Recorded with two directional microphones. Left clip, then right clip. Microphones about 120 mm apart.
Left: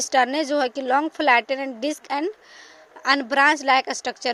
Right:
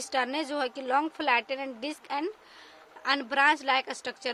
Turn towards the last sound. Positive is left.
turn(degrees=45)  # may be behind; listen again after turning